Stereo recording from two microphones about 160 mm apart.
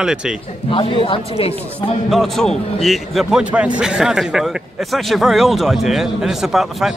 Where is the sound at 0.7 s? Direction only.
30° left (ahead or behind).